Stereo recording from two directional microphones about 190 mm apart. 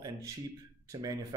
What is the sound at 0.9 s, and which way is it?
Speech, 20° right (ahead or behind).